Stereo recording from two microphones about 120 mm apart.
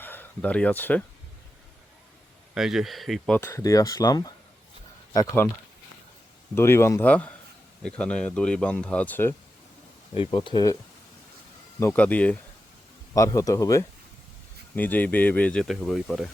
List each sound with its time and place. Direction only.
0.0 s speech: 15° left (ahead or behind)
2.6 s speech: 5° right (ahead or behind)
3.4 s speech: 25° left (ahead or behind)
6.5 s speech: 20° left (ahead or behind)
10.2 s speech: 40° left (ahead or behind)
11.8 s speech: 15° left (ahead or behind)
13.1 s speech: 25° left (ahead or behind)
14.8 s speech: 15° left (ahead or behind)